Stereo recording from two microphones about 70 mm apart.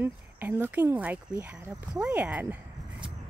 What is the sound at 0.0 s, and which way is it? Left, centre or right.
Speech, right.